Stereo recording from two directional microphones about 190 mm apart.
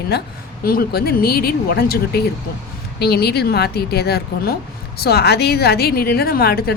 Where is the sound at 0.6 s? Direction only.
50° left (ahead or behind).